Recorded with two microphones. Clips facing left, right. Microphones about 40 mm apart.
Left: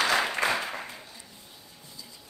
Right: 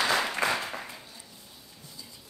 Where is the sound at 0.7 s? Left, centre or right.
Centre.